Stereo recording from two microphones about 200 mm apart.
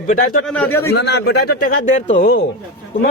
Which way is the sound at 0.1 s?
45° left (ahead or behind).